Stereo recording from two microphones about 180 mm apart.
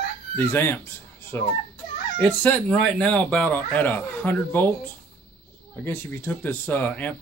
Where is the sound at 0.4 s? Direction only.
15° left (ahead or behind).